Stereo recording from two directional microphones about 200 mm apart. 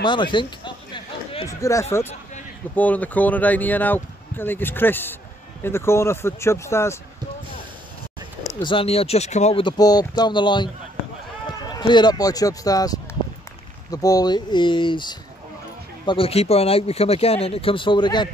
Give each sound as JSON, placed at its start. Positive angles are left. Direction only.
{"t": 0.0, "sound": "a sound", "side_deg": 25}
{"t": 2.7, "sound": "speech", "side_deg": 5}
{"t": 8.6, "sound": "speech", "side_deg": 30}